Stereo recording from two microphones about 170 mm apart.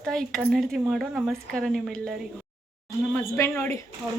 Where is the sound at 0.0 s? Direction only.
5° left (ahead or behind).